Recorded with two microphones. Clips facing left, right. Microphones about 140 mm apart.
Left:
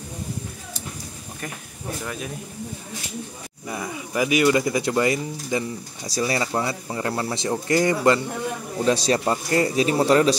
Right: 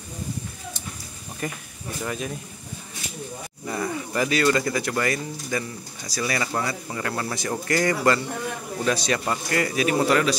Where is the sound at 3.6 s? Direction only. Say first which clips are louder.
Right 3 dB; 10° left (ahead or behind).